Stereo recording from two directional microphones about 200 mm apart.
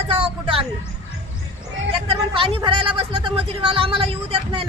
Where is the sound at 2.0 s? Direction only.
25° right (ahead or behind).